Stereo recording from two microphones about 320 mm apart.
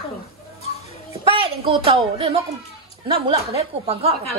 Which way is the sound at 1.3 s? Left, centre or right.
Centre.